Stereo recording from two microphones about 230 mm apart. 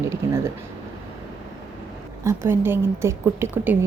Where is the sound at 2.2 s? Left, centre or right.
Centre.